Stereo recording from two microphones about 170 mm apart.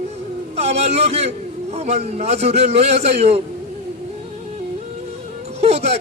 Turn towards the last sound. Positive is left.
turn(degrees=-40)  # may be behind; listen again after turning